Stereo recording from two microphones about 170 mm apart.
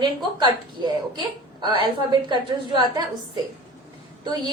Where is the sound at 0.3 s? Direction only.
25° right (ahead or behind).